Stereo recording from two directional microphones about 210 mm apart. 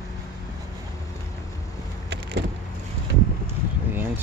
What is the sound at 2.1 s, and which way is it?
Vehicle, 55° right (ahead or behind).